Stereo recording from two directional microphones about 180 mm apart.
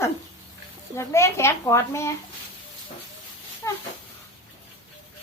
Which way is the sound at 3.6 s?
15° left (ahead or behind).